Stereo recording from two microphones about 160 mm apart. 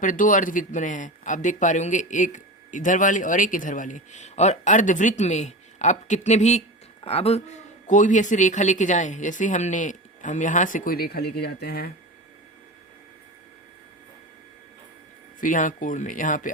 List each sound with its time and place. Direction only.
0.0 s speech: 55° left (ahead or behind); by 7.4 s 40° left (ahead or behind)
7.9 s speech: 50° left (ahead or behind); by 11.9 s 85° left
15.4 s speech: 55° left (ahead or behind)